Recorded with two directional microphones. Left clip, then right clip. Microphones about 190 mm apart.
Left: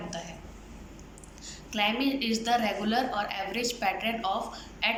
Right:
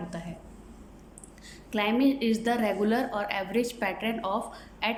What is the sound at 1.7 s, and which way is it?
A woman's voice, 55° right (ahead or behind).